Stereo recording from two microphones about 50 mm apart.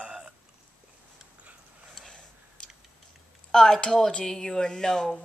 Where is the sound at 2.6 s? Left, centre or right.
Centre.